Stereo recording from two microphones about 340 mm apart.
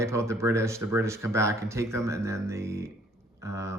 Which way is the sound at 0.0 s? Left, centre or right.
Centre.